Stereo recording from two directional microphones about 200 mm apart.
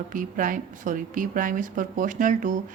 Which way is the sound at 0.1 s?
40° right (ahead or behind).